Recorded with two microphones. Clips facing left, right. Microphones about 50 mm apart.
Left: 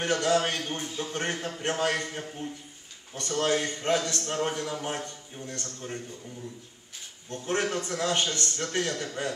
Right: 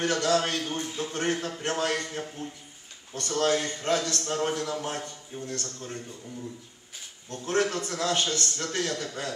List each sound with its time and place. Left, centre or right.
0.0 s a man's voice: centre
2.0 s a man's voice: centre
3.2 s a man's voice: left
7.2 s a man's voice: left